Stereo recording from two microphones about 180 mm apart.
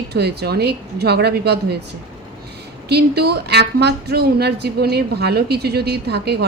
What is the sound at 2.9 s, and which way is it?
A woman's voice, 65° right (ahead or behind).